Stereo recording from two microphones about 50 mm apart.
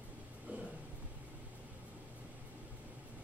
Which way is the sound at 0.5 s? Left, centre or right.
Right.